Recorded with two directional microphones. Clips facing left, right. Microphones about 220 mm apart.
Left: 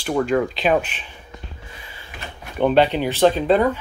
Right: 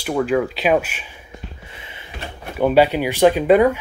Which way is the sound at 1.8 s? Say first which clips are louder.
Right 2 dB; 20° right (ahead or behind).